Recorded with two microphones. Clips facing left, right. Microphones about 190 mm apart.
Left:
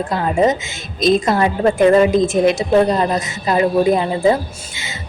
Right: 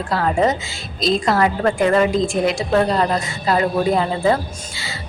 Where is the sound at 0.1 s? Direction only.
20° left (ahead or behind).